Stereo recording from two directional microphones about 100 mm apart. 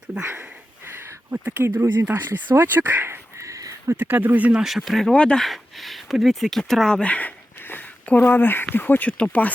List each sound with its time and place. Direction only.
0.2 s speech: 25° right (ahead or behind)
1.8 s speech: 30° right (ahead or behind)
2.0 s a sound: 20° right (ahead or behind)
3.9 s speech: 20° right (ahead or behind)
4.6 s speech: 5° right (ahead or behind); by 9.5 s 15° left (ahead or behind)